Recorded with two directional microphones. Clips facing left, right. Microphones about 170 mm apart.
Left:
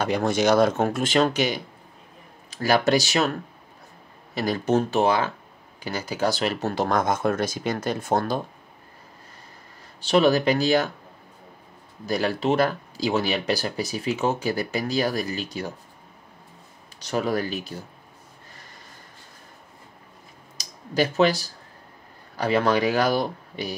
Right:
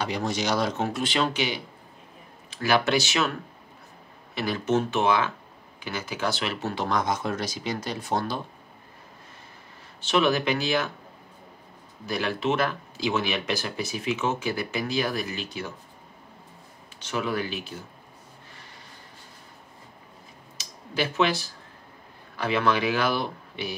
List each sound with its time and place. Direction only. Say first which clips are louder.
0.0 s speech: left 6 dB; 55° left (ahead or behind)
4.4 s speech: left 3 dB; 40° left (ahead or behind)
9.9 s speech: left 4 dB; 35° left (ahead or behind)
12.1 s speech: left 3 dB; 40° left (ahead or behind)
17.0 s speech: left 4 dB; 40° left (ahead or behind)
20.5 s a sound: left 5 dB; 40° left (ahead or behind)
22.4 s speech: left 3 dB; 40° left (ahead or behind)